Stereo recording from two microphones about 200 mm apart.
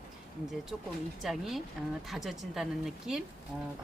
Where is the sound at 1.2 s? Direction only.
Centre (ahead or behind).